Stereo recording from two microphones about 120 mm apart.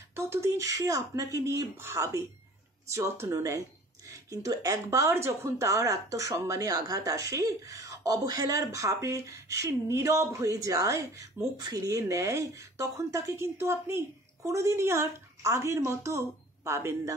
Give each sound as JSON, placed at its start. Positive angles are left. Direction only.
{"t": 0.1, "sound": "speech", "side_deg": -25}